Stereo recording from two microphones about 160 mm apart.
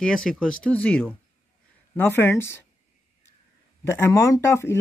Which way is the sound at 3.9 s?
20° left (ahead or behind).